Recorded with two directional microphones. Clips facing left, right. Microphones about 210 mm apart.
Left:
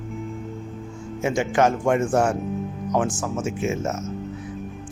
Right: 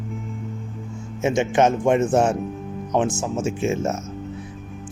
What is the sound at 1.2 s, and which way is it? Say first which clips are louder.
Speech: right 2 dB; 20° right (ahead or behind).